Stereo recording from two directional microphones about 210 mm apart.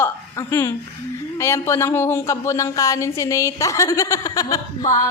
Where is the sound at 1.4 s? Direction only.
10° left (ahead or behind).